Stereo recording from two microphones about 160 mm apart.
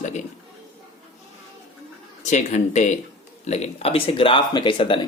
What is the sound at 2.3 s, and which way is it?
Speech, 45° left (ahead or behind).